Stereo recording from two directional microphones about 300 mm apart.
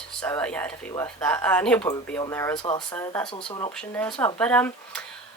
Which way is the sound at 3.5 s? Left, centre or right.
Centre.